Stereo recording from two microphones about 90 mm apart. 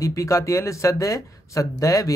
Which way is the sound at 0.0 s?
35° left (ahead or behind).